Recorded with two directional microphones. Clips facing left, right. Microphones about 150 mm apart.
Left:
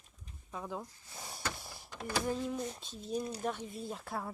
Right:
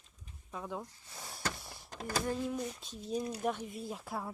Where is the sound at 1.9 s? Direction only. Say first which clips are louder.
Even; 40° right (ahead or behind).